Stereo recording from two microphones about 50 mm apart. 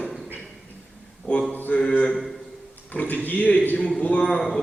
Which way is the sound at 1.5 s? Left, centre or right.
Left.